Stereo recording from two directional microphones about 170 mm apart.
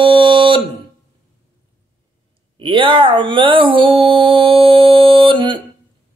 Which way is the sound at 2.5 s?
30° right (ahead or behind).